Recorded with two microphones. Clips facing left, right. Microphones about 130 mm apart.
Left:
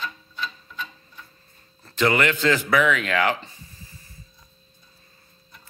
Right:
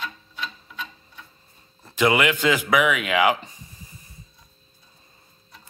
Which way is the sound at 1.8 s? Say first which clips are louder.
Right 1 dB; 10° right (ahead or behind).